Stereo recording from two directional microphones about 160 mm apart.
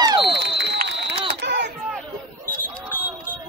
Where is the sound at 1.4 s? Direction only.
90° right.